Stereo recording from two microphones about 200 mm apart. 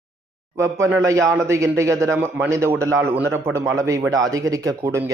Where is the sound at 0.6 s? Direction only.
15° right (ahead or behind).